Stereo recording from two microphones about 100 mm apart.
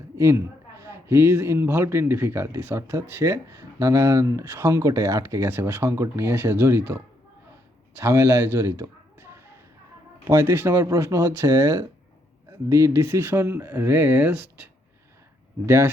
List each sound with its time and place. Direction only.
0.2 s a man's voice: 30° right (ahead or behind)
8.5 s a sound: 30° right (ahead or behind)
10.2 s a man's voice: 25° right (ahead or behind)